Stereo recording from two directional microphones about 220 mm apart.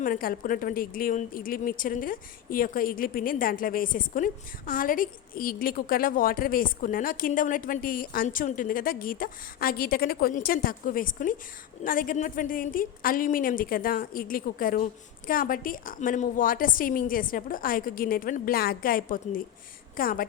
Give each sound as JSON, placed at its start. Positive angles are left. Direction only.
{"t": 0.0, "sound": "a woman's voice", "side_deg": 40}